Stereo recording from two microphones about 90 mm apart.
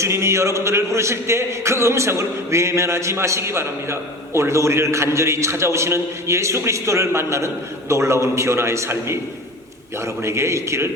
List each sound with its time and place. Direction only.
0.0 s a man's voice: 30° right (ahead or behind)
10.2 s a man's voice: 30° right (ahead or behind)